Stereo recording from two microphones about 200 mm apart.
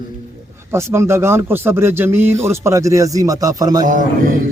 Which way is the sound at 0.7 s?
15° right (ahead or behind).